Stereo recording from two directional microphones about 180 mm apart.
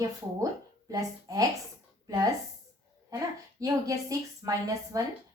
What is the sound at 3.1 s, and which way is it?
Speech, 20° right (ahead or behind).